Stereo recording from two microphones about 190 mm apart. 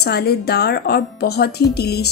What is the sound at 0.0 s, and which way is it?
A woman's voice, 60° left (ahead or behind).